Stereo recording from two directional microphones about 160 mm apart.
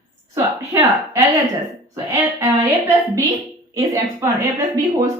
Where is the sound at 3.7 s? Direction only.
20° right (ahead or behind).